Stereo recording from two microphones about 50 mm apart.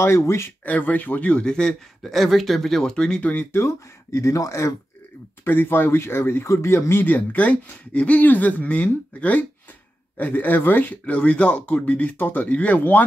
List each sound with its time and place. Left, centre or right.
0.0 s speech: left
0.7 s speech: left
1.4 s speech: centre
2.0 s speech: centre
3.2 s speech: left
3.5 s speech: left
5.4 s speech: left
6.5 s speech: left
7.0 s speech: left
11.1 s speech: left